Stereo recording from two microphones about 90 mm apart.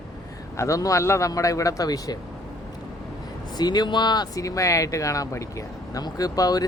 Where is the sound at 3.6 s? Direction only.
50° left (ahead or behind).